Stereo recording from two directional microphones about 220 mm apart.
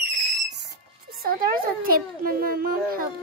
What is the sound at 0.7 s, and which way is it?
A child's voice, 45° right (ahead or behind).